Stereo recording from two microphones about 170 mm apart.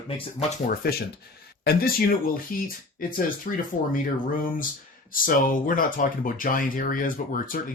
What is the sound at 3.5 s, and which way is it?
Speech, 50° left (ahead or behind).